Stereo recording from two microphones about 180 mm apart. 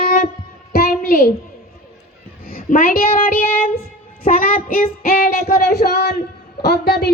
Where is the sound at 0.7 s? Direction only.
55° left (ahead or behind).